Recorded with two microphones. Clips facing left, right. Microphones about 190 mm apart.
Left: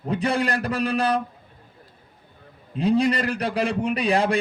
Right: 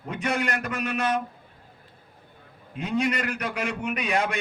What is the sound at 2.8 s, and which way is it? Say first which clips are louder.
Speech: left 6 dB; 35° left (ahead or behind).